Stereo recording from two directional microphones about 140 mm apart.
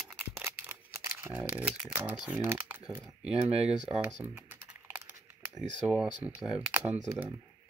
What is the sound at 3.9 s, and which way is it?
Typing, 10° right (ahead or behind).